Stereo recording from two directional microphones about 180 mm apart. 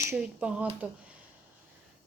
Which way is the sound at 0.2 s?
5° right (ahead or behind).